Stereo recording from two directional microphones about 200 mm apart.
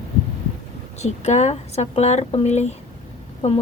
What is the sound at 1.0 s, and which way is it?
Speech, 35° left (ahead or behind).